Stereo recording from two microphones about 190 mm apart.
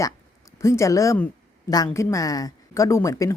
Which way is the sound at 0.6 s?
15° left (ahead or behind).